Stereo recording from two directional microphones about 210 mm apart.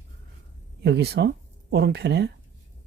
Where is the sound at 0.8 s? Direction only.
50° right (ahead or behind).